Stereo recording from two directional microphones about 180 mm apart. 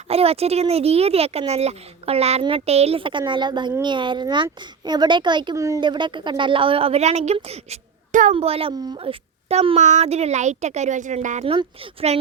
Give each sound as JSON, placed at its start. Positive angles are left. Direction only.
{"t": 0.1, "sound": "speech", "side_deg": -35}
{"t": 11.4, "sound": "speech", "side_deg": -30}